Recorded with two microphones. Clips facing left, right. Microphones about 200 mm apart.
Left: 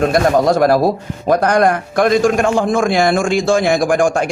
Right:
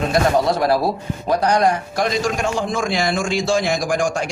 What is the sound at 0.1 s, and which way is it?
A man's voice, 50° left (ahead or behind).